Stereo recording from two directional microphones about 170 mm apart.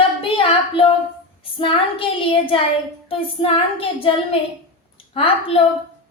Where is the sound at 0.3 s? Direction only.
30° left (ahead or behind).